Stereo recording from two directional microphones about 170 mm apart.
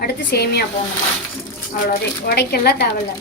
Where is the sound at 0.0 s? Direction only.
80° left.